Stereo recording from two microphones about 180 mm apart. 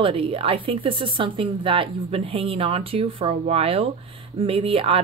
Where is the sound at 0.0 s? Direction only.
30° right (ahead or behind).